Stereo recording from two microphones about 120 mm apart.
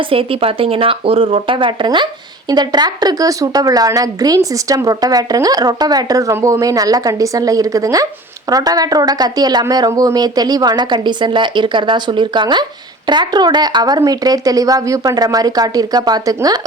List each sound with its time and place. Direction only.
0.0 s a woman's voice: 50° right (ahead or behind); by 16.6 s 30° right (ahead or behind)